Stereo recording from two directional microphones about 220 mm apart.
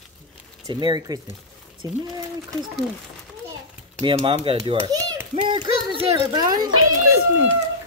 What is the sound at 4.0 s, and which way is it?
Speech, 25° right (ahead or behind).